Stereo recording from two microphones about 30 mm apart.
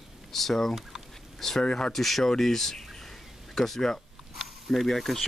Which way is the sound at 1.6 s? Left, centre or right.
Left.